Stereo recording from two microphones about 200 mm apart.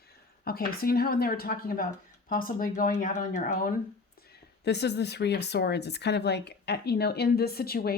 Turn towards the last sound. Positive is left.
turn(degrees=50)  # may be behind; listen again after turning